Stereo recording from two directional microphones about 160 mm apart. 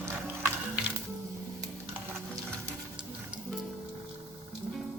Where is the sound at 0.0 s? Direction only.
15° right (ahead or behind).